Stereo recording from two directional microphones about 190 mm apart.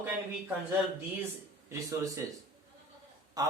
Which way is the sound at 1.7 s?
15° right (ahead or behind).